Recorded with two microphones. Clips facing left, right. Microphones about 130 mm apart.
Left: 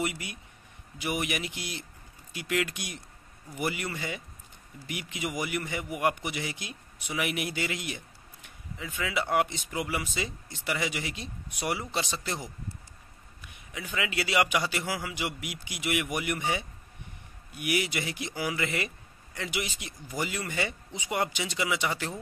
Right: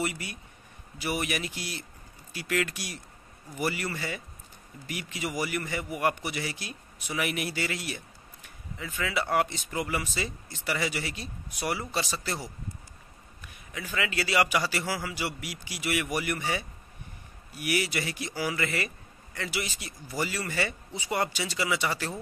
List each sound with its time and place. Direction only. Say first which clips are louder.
0.0 s a man's voice: even; 15° left (ahead or behind)
13.9 s a man's voice: right 1 dB; 15° left (ahead or behind)